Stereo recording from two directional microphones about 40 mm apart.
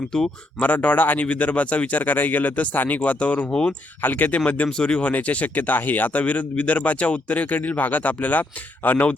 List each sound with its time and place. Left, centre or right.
0.1 s speech: centre
0.6 s speech: left
3.0 s speech: left
3.5 s speech: left
4.0 s speech: left
5.1 s speech: left